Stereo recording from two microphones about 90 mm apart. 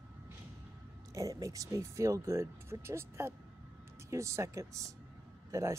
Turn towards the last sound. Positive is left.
turn(degrees=-35)  # may be behind; listen again after turning